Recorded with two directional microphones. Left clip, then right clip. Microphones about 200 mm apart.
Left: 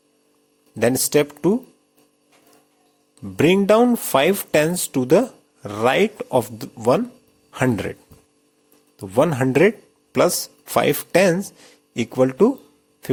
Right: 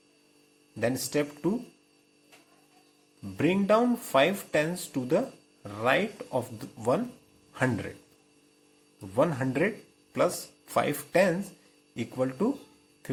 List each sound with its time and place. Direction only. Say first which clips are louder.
0.8 s speech: left 11 dB; 50° left (ahead or behind)
3.3 s speech: left 10 dB; 50° left (ahead or behind)
9.0 s speech: left 8 dB; 45° left (ahead or behind)